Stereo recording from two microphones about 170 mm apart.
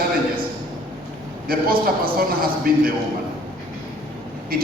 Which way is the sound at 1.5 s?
60° right (ahead or behind).